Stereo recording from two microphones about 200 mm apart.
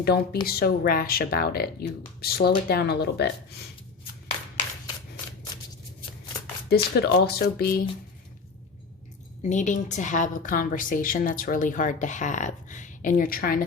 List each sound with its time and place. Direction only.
0.4 s speech: 50° left (ahead or behind)
6.7 s speech: 55° left (ahead or behind)
9.4 s a woman's voice: 35° left (ahead or behind)